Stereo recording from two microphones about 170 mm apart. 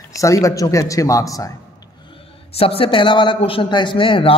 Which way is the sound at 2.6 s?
35° left (ahead or behind).